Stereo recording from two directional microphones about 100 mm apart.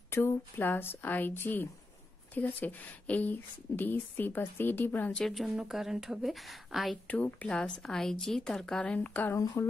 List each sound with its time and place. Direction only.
0.1 s speech: 25° left (ahead or behind)
5.1 s speech: 5° left (ahead or behind)
7.1 s a woman's voice: 15° left (ahead or behind)
9.3 s speech: 30° left (ahead or behind)